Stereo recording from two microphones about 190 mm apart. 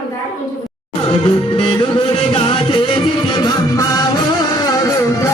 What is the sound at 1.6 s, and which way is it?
Music, 25° left (ahead or behind).